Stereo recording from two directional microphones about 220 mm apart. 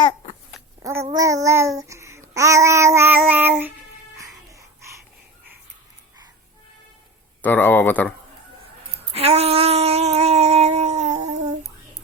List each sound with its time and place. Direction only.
0.8 s babbling: 15° right (ahead or behind)
7.4 s speech: 10° left (ahead or behind)
9.1 s a sound: 30° right (ahead or behind)